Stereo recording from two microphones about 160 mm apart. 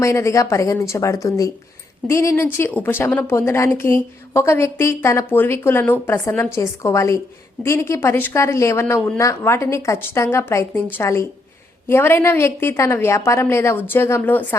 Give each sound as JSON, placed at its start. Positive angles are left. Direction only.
{"t": 0.0, "sound": "a woman's voice", "side_deg": 15}